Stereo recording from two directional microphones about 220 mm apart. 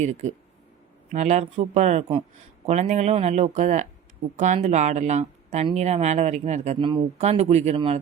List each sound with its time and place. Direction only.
0.0 s speech: 30° right (ahead or behind)